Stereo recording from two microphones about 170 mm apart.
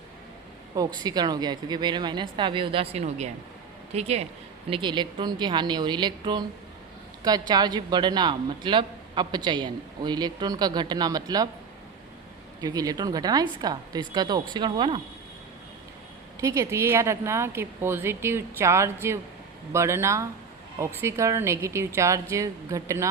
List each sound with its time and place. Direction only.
1.0 s a woman's voice: 25° right (ahead or behind)
4.7 s a woman's voice: 25° right (ahead or behind)
12.6 s a woman's voice: 20° right (ahead or behind)
16.4 s speech: 20° right (ahead or behind)